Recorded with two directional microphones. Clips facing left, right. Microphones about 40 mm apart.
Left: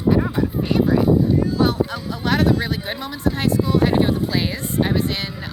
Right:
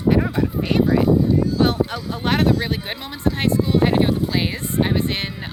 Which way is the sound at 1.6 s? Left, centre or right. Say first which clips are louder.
Even; right.